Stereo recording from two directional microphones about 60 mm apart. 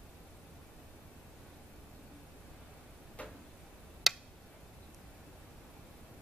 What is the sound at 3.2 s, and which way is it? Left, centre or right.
Tick-tock, left.